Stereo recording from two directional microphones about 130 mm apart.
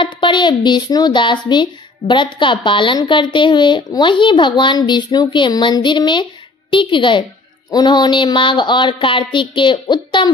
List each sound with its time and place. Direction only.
0.0 s a woman's voice: 40° left (ahead or behind)